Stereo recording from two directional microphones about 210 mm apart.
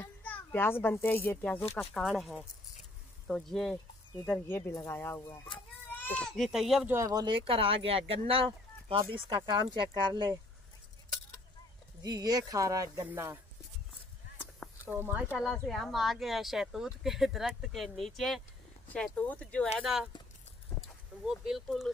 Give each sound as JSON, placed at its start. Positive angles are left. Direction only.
{"t": 0.0, "sound": "a child's voice", "side_deg": 5}
{"t": 7.0, "sound": "speech", "side_deg": -15}
{"t": 12.0, "sound": "speech", "side_deg": -20}
{"t": 14.9, "sound": "speech", "side_deg": -10}
{"t": 21.3, "sound": "speech", "side_deg": 0}